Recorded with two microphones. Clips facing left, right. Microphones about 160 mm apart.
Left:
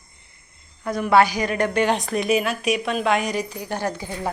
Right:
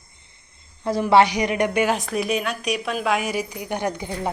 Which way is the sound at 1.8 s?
Centre (ahead or behind).